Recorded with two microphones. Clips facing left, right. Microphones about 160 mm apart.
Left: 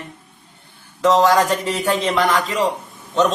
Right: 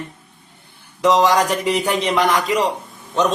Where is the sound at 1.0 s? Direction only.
15° right (ahead or behind).